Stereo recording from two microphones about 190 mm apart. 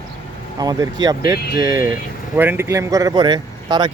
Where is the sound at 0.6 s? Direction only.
20° right (ahead or behind).